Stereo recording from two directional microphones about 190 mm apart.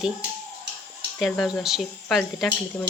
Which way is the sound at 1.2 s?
Centre (ahead or behind).